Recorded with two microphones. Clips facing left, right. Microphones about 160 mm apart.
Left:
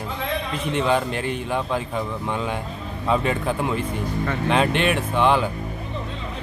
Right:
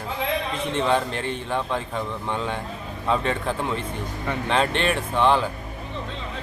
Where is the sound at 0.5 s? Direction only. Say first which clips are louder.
Left 1 dB; 30° right (ahead or behind).